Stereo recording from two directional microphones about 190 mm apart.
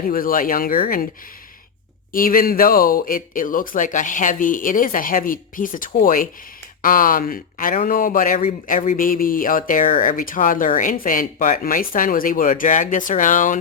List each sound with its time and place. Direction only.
0.1 s speech: 50° left (ahead or behind)
2.1 s speech: 50° left (ahead or behind)